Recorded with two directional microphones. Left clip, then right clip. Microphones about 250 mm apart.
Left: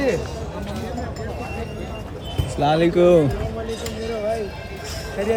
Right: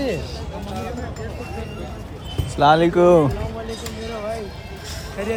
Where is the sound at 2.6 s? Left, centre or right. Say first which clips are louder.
Right 2 dB; centre.